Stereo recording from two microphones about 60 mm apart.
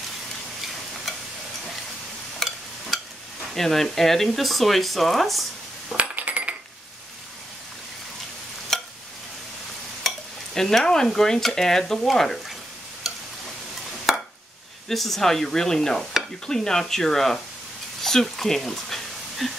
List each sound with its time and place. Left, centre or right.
2.4 s stir: centre
3.5 s speech: centre
6.1 s cutlery: right
8.7 s stir: centre
10.0 s stir: centre
11.1 s speech: centre
14.1 s a sound: centre
14.9 s speech: centre